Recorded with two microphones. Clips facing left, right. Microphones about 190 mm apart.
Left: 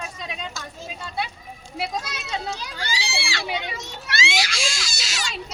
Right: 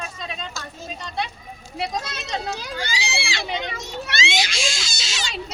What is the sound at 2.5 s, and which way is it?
Speech, 10° right (ahead or behind).